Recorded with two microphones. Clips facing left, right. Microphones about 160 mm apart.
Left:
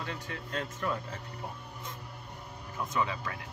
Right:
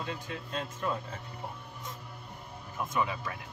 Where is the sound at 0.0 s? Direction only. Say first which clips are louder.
Right 1 dB; 20° right (ahead or behind).